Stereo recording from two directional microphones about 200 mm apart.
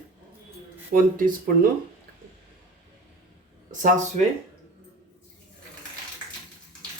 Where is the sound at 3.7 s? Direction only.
40° right (ahead or behind).